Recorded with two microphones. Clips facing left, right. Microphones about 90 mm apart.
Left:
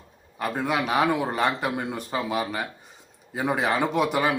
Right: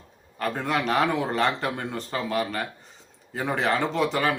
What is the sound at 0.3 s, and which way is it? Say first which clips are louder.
Speech: left 1 dB; 10° left (ahead or behind).